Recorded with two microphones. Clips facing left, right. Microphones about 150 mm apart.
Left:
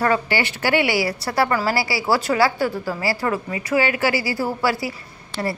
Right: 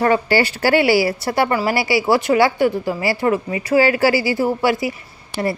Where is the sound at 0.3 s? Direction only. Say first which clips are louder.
Right 5 dB; 35° right (ahead or behind).